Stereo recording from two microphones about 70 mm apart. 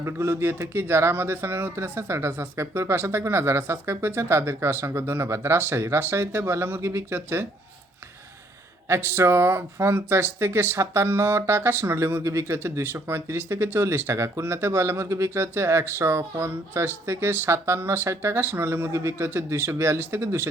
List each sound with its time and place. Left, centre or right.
0.0 s speech: right
8.9 s speech: right